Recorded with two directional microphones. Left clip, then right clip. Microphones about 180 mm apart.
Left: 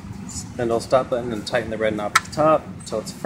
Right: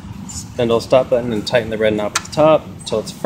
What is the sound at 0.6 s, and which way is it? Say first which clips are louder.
Speech: right 6 dB; 45° right (ahead or behind).